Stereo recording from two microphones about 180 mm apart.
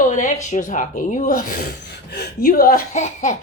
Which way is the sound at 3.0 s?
45° left (ahead or behind).